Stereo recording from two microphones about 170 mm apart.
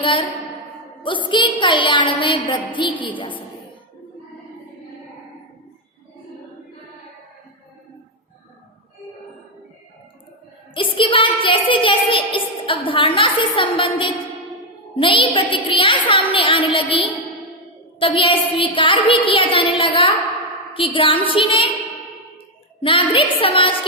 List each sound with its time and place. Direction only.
0.0 s a woman's voice: 30° left (ahead or behind)
10.8 s music: 30° left (ahead or behind)
14.9 s a woman's voice: 30° left (ahead or behind)
22.8 s a woman's voice: 30° left (ahead or behind)